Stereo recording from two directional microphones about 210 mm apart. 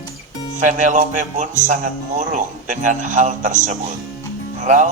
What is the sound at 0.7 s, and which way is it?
Speech, 35° right (ahead or behind).